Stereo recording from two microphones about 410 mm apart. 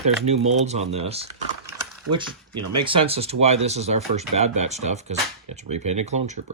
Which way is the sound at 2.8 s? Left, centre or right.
Centre.